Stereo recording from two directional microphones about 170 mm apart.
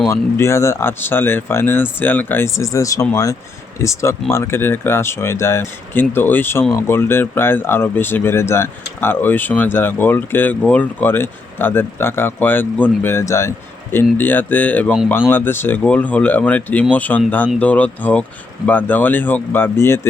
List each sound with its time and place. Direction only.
0.1 s speech: 15° left (ahead or behind)